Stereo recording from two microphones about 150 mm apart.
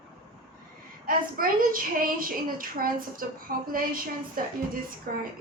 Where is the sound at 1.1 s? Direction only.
70° right (ahead or behind).